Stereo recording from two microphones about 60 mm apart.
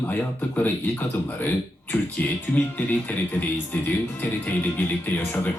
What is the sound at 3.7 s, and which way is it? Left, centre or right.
Speech, left.